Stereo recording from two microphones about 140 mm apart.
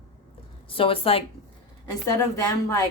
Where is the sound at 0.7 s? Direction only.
40° left (ahead or behind).